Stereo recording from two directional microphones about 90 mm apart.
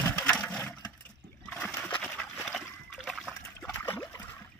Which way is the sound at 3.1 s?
Centre (ahead or behind).